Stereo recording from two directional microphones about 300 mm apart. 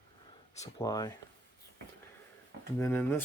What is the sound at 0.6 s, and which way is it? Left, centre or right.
Speech, centre.